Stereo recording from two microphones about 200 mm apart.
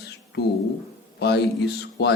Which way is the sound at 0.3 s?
60° left (ahead or behind).